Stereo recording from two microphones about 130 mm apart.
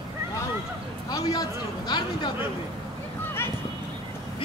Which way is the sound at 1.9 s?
35° left (ahead or behind).